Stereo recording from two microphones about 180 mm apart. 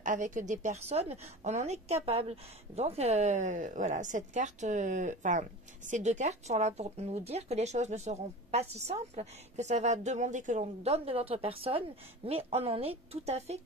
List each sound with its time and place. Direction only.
0.0 s a woman's voice: 45° right (ahead or behind)